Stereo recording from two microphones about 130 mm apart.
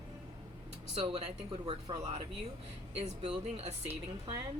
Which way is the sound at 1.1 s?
50° right (ahead or behind).